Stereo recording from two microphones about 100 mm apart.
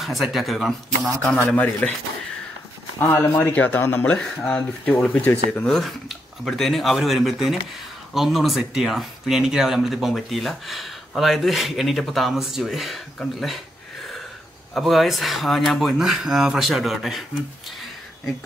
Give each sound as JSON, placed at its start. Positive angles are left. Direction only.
{"t": 0.0, "sound": "speech", "side_deg": 0}
{"t": 1.5, "sound": "speech", "side_deg": 10}
{"t": 3.0, "sound": "speech", "side_deg": 30}
{"t": 3.3, "sound": "speech", "side_deg": 20}
{"t": 14.7, "sound": "speech", "side_deg": 0}